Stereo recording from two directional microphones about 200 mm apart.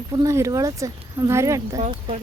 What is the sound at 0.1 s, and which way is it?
Speech, 15° right (ahead or behind).